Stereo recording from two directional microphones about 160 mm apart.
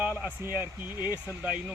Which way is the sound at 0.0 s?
10° right (ahead or behind).